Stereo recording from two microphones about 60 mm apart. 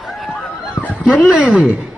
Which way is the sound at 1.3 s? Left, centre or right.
Centre.